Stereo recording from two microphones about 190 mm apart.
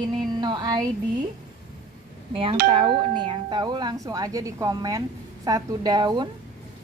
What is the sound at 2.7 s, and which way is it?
Speech, 25° right (ahead or behind).